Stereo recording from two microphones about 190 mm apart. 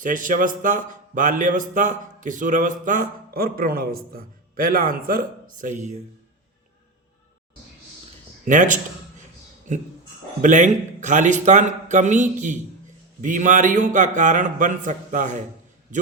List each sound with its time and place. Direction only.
0.0 s speech: 45° right (ahead or behind)
8.4 s a man's voice: 40° right (ahead or behind)